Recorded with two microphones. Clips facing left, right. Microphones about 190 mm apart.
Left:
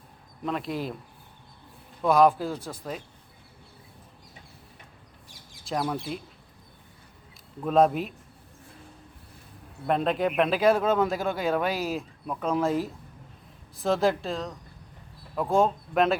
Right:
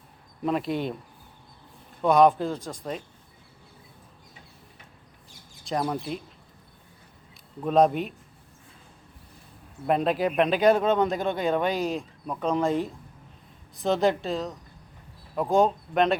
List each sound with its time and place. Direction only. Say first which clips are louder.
0.4 s speech: right 4 dB; centre (ahead or behind)
2.0 s speech: right 1 dB; centre (ahead or behind)
5.6 s speech: right 1 dB; centre (ahead or behind)
7.6 s speech: right 1 dB; centre (ahead or behind)
9.8 s speech: right 1 dB; centre (ahead or behind)